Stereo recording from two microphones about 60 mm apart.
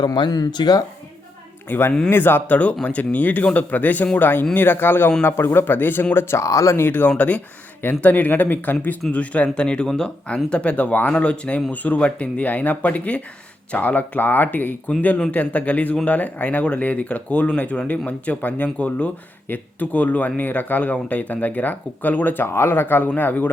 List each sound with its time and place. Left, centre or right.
0.1 s speech: left
1.7 s speech: left
2.8 s speech: left
6.1 s speech: left
6.7 s speech: left
7.2 s speech: left